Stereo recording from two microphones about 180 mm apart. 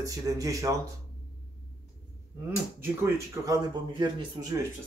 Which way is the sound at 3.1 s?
15° right (ahead or behind).